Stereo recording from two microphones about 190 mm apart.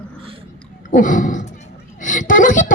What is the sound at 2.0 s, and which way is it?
Speech, 45° left (ahead or behind).